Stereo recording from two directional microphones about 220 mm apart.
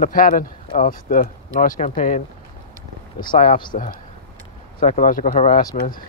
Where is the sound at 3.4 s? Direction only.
25° left (ahead or behind).